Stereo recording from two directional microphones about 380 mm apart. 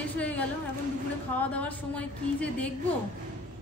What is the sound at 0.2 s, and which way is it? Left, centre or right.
Speech, centre.